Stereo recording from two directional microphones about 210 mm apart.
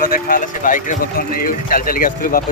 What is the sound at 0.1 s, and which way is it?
Speech, 40° left (ahead or behind).